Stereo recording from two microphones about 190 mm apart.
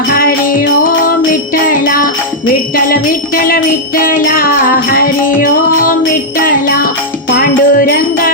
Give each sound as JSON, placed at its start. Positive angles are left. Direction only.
{"t": 0.1, "sound": "music", "side_deg": 50}
{"t": 6.3, "sound": "jingle bell", "side_deg": 50}
{"t": 7.3, "sound": "music", "side_deg": 50}